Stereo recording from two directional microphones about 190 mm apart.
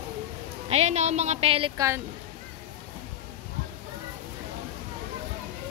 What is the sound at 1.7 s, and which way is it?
Speech, 15° right (ahead or behind).